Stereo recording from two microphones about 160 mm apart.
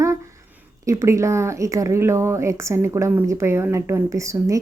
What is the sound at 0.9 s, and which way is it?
Speech, 20° right (ahead or behind).